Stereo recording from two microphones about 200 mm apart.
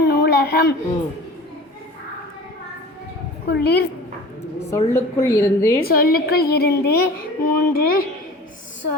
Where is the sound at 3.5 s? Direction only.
55° left (ahead or behind).